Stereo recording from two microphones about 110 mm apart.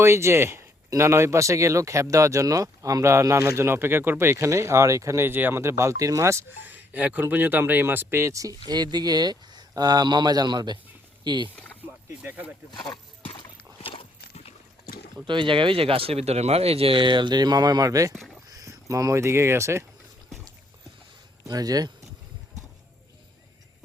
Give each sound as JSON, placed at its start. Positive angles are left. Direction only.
{"t": 0.0, "sound": "speech", "side_deg": -25}
{"t": 11.5, "sound": "rowboat", "side_deg": 15}
{"t": 12.2, "sound": "speech", "side_deg": -15}
{"t": 13.8, "sound": "horse", "side_deg": 55}
{"t": 15.3, "sound": "speech", "side_deg": -50}
{"t": 21.4, "sound": "speech", "side_deg": -35}